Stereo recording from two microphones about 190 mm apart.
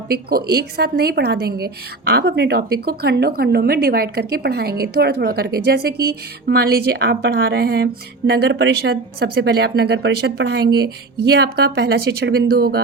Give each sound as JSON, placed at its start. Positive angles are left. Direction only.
{"t": 0.1, "sound": "a woman's voice", "side_deg": -55}